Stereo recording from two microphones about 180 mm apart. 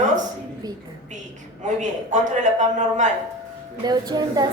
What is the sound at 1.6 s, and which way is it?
A man's voice, 40° right (ahead or behind).